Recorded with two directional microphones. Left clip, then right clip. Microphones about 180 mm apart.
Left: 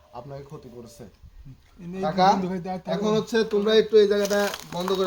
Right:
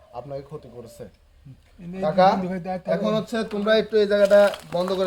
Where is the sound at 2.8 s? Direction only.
25° right (ahead or behind).